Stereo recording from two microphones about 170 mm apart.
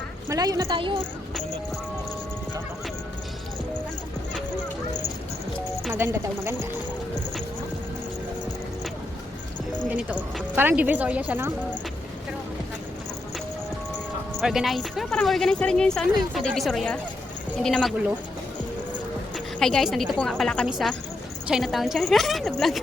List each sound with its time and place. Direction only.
0.3 s a woman's voice: 20° right (ahead or behind)
5.9 s speech: 15° right (ahead or behind)
9.9 s speech: 10° right (ahead or behind)
14.4 s speech: centre (ahead or behind)
19.5 s speech: 5° left (ahead or behind)